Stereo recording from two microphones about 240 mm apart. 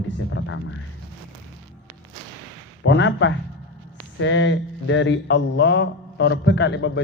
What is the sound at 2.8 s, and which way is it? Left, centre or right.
Speech, left.